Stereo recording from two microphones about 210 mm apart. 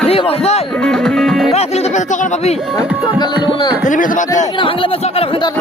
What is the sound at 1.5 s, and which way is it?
Speech, 30° left (ahead or behind).